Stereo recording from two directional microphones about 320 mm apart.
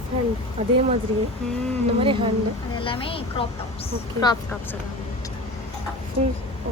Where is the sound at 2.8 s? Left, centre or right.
Centre.